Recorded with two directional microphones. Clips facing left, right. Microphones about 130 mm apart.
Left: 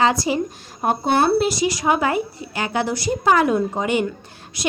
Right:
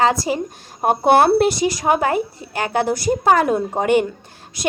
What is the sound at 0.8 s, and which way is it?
Speech, 60° right (ahead or behind).